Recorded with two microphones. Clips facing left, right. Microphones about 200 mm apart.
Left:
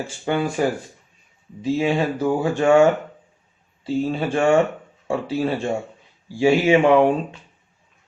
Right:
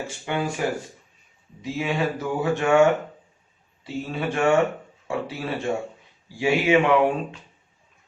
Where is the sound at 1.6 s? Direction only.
30° left (ahead or behind).